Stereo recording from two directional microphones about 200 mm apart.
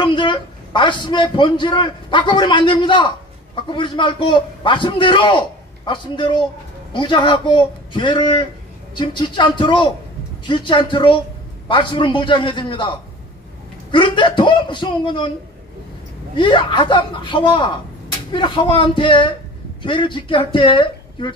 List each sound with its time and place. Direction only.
0.0 s a man's voice: 25° left (ahead or behind)
13.9 s a man's voice: 25° left (ahead or behind)
16.3 s a man's voice: 25° left (ahead or behind)